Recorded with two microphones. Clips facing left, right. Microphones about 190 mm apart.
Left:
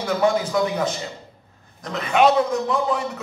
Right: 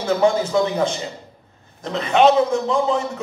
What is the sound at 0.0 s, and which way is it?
A man's voice, 25° right (ahead or behind).